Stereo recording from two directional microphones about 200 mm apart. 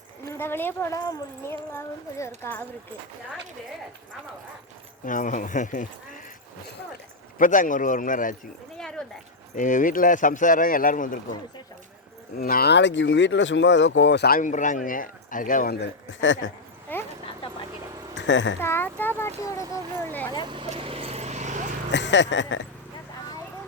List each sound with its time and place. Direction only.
0.3 s speech: 10° left (ahead or behind)
5.0 s speech: 40° left (ahead or behind)
7.3 s speech: 40° left (ahead or behind)
8.8 s dog: 5° left (ahead or behind)
9.6 s speech: 40° left (ahead or behind)
12.4 s speech: 45° left (ahead or behind); by 16.5 s 70° left (ahead or behind)
16.9 s dog: 10° left (ahead or behind)
18.3 s speech: 65° left (ahead or behind)
18.6 s a child's voice: 10° left (ahead or behind)
20.4 s vehicle: 25° right (ahead or behind)
21.9 s speech: 65° left (ahead or behind)